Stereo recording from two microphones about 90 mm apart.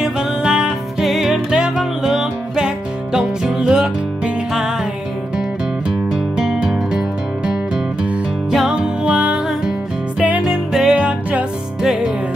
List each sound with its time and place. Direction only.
0.0 s music: 10° right (ahead or behind)
6.3 s music: 5° right (ahead or behind)
11.8 s music: 5° right (ahead or behind)